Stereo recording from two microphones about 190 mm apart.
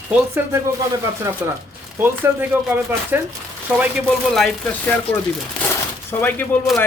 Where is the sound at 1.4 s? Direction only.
10° right (ahead or behind); by 4.9 s 5° left (ahead or behind).